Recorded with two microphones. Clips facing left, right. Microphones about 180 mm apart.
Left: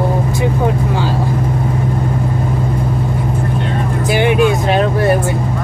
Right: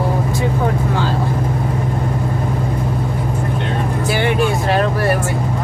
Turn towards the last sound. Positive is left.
turn(degrees=20)  # may be behind; listen again after turning